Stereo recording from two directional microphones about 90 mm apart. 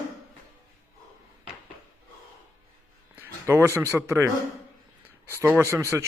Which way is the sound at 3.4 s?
30° right (ahead or behind).